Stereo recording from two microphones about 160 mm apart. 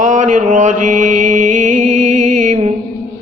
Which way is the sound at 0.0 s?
50° right (ahead or behind).